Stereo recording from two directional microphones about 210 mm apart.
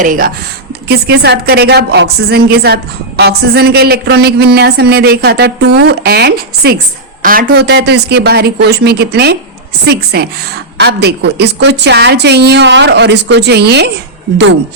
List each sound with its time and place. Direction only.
0.0 s speech: 40° right (ahead or behind)
0.9 s a woman's voice: 50° right (ahead or behind)